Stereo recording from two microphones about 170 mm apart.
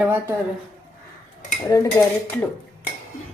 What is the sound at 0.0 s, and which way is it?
Speech, 10° right (ahead or behind).